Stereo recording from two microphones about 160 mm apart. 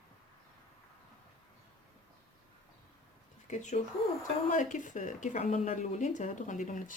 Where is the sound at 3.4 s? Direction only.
50° left (ahead or behind).